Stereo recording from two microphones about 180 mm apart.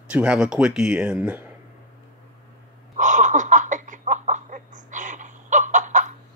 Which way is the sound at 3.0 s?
45° right (ahead or behind).